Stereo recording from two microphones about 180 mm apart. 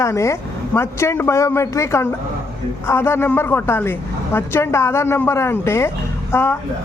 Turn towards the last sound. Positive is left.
turn(degrees=15)  # may be behind; listen again after turning